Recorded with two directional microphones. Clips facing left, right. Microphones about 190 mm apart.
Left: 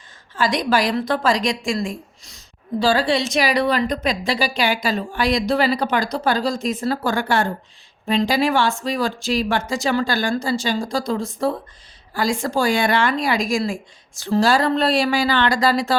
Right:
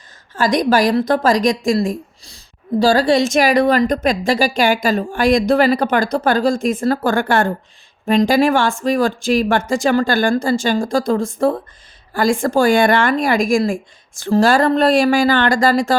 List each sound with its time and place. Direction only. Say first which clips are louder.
0.3 s a woman's voice: right 5 dB; 45° right (ahead or behind)